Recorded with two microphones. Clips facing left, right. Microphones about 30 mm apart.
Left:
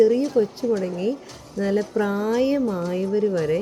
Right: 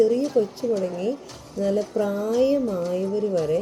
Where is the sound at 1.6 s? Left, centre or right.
Centre.